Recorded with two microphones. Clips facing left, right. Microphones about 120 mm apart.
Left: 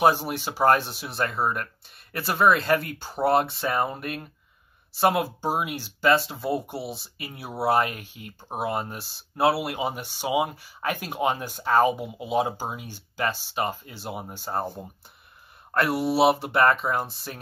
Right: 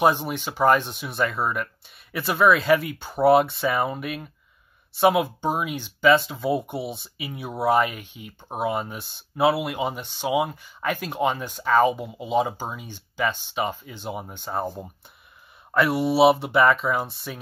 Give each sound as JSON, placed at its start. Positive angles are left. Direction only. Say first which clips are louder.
{"t": 0.0, "sound": "speech", "louder": "even", "side_deg": 5}
{"t": 15.7, "sound": "speech", "louder": "right 2 dB", "side_deg": 0}